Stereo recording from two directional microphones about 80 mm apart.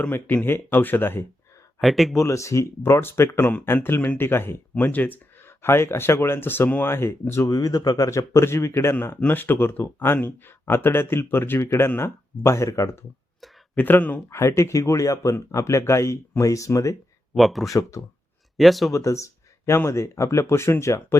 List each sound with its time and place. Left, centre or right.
0.0 s speech: centre
1.8 s speech: centre
2.1 s speech: left
13.7 s speech: left
14.3 s speech: left
17.3 s speech: centre
17.7 s speech: left
18.5 s speech: centre
18.9 s speech: left